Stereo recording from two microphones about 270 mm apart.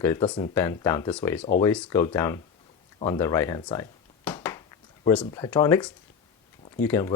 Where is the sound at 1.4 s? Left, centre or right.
Left.